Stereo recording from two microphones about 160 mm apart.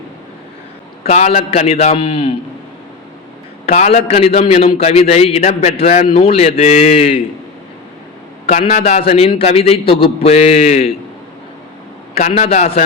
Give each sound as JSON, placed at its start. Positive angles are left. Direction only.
{"t": 1.0, "sound": "a man's voice", "side_deg": 45}
{"t": 3.7, "sound": "a man's voice", "side_deg": 45}
{"t": 8.6, "sound": "a man's voice", "side_deg": 40}
{"t": 12.3, "sound": "a man's voice", "side_deg": 40}